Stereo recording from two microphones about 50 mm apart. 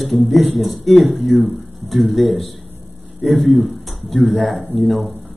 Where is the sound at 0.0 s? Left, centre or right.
Centre.